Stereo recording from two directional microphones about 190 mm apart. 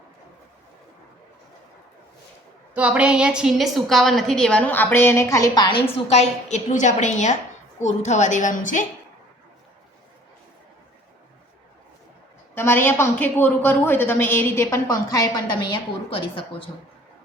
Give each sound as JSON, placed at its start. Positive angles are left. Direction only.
{"t": 2.7, "sound": "a woman's voice", "side_deg": -5}
{"t": 6.1, "sound": "a woman's voice", "side_deg": 35}
{"t": 12.5, "sound": "a woman's voice", "side_deg": 10}